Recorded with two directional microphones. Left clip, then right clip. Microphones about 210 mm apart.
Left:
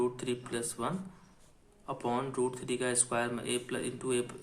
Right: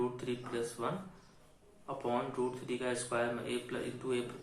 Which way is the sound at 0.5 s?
55° left (ahead or behind).